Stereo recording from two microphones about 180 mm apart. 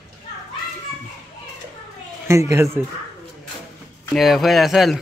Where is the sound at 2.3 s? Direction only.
15° right (ahead or behind).